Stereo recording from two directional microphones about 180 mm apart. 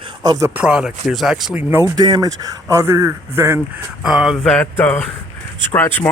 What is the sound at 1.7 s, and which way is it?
Speech, 20° right (ahead or behind).